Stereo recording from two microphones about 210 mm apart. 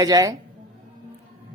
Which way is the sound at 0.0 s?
15° right (ahead or behind).